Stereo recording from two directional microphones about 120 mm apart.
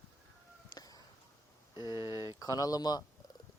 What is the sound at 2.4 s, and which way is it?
Speech, 30° left (ahead or behind).